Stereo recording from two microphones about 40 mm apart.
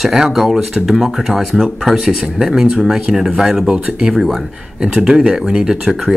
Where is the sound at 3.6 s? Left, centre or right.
Right.